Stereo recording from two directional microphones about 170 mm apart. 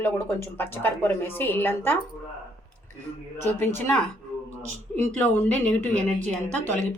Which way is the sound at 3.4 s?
10° left (ahead or behind).